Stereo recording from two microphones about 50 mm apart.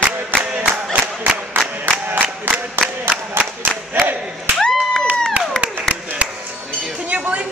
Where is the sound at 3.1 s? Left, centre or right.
Right.